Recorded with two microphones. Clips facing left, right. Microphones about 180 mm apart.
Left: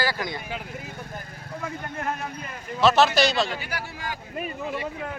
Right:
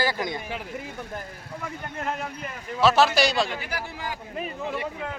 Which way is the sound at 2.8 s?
10° right (ahead or behind).